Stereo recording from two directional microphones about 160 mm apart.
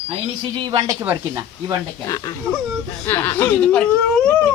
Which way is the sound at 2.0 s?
20° left (ahead or behind).